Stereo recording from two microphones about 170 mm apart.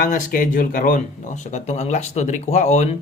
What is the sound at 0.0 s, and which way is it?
Speech, 55° left (ahead or behind).